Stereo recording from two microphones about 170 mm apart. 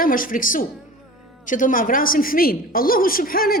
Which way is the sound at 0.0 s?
55° left (ahead or behind).